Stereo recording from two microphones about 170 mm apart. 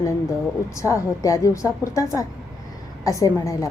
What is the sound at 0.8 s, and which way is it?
A woman's voice, 20° left (ahead or behind).